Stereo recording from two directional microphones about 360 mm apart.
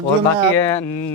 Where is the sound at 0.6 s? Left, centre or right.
Centre.